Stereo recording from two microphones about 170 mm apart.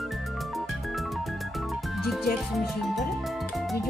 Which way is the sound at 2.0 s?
Centre (ahead or behind).